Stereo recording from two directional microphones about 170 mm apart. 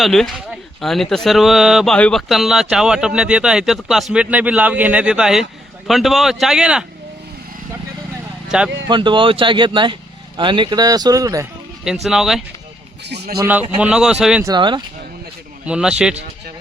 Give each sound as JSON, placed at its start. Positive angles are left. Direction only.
{"t": 0.0, "sound": "speech", "side_deg": 0}
{"t": 8.5, "sound": "speech", "side_deg": -5}
{"t": 8.9, "sound": "speech", "side_deg": -30}
{"t": 12.0, "sound": "speech", "side_deg": 0}
{"t": 13.4, "sound": "a man's voice", "side_deg": -10}
{"t": 14.4, "sound": "speech", "side_deg": -25}
{"t": 15.6, "sound": "speech", "side_deg": -5}